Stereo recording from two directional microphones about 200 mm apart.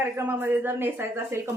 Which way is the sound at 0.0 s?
10° right (ahead or behind).